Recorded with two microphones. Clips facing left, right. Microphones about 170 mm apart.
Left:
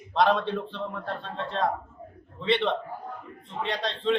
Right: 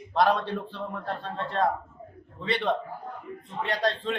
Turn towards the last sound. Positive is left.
turn(degrees=-5)  # may be behind; listen again after turning